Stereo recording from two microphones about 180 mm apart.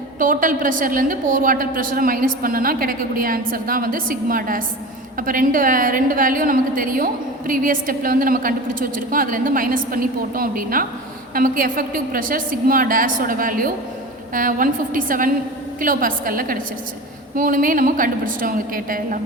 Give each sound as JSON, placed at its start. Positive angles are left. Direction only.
{"t": 0.2, "sound": "a woman's voice", "side_deg": -50}